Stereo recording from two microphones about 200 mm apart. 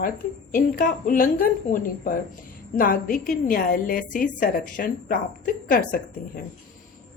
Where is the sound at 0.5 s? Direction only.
45° left (ahead or behind).